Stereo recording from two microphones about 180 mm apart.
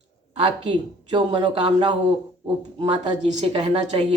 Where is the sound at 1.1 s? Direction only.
25° right (ahead or behind).